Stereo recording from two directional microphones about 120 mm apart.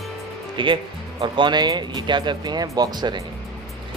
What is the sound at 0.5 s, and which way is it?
Speech, 45° right (ahead or behind).